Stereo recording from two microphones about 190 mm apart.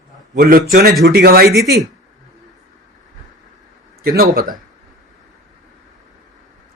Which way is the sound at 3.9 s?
50° right (ahead or behind).